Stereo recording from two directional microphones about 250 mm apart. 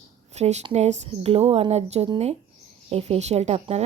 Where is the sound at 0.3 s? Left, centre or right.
Right.